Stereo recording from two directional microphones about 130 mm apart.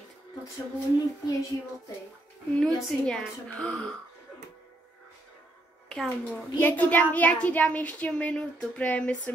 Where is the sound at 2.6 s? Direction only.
5° left (ahead or behind).